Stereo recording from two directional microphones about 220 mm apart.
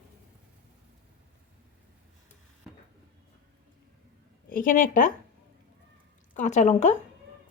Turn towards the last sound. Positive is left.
turn(degrees=35)  # may be behind; listen again after turning